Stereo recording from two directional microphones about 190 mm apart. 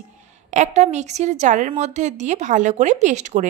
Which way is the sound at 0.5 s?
40° right (ahead or behind).